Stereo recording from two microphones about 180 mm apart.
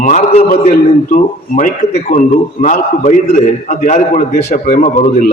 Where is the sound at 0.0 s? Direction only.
40° left (ahead or behind).